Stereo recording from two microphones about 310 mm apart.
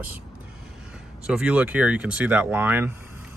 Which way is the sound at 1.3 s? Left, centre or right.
Centre.